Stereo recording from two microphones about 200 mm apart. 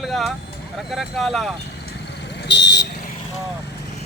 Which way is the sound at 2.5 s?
60° left (ahead or behind).